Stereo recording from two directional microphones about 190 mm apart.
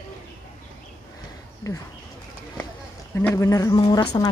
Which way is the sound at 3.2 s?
15° left (ahead or behind).